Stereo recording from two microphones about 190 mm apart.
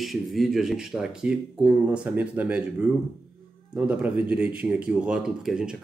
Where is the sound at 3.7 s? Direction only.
5° right (ahead or behind).